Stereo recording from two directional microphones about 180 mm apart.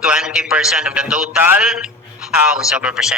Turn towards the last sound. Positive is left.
turn(degrees=-5)  # may be behind; listen again after turning